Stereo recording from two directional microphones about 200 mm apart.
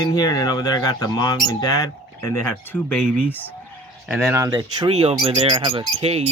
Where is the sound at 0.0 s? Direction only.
20° left (ahead or behind).